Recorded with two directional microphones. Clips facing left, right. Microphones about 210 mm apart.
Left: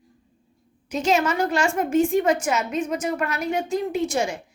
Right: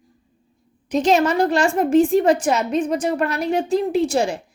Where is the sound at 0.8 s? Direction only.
35° right (ahead or behind).